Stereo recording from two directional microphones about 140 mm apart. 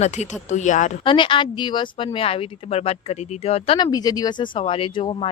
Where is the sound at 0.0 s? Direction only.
55° left (ahead or behind).